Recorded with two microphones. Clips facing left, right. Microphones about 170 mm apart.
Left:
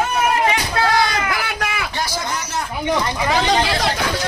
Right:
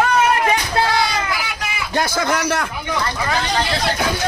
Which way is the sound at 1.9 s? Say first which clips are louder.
Right 10 dB; 50° right (ahead or behind).